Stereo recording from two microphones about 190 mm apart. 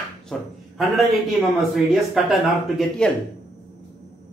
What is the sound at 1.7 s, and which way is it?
Speech, centre (ahead or behind).